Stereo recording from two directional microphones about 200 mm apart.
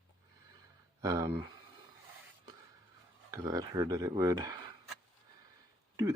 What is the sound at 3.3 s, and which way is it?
Speech, 15° right (ahead or behind).